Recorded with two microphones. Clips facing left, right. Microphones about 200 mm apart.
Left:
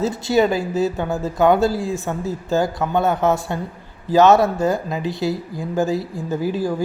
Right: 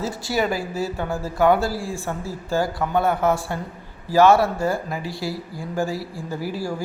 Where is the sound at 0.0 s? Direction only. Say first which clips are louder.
Left 6 dB; 25° left (ahead or behind).